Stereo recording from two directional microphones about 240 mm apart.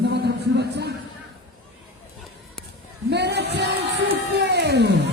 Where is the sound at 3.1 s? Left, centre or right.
Right.